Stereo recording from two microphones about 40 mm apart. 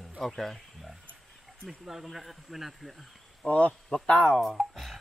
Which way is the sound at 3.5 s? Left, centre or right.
Left.